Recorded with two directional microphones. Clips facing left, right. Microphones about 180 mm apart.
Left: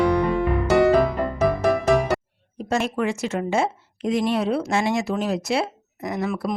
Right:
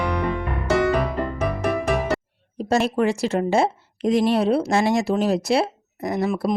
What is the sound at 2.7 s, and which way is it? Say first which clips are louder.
A woman's voice: right 3 dB; 35° right (ahead or behind).